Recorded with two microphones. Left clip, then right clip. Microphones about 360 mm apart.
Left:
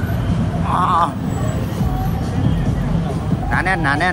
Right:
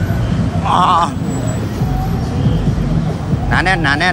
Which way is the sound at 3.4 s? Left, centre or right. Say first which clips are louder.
Right 4 dB; centre.